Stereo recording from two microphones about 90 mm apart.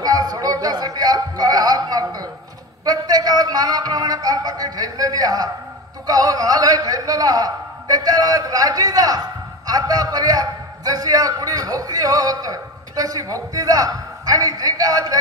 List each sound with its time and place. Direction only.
0.0 s music: 45° right (ahead or behind)
2.8 s a man's voice: 45° right (ahead or behind)